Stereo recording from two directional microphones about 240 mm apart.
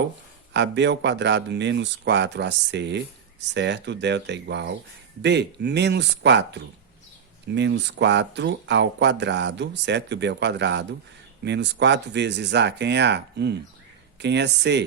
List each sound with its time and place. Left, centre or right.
0.5 s speech: right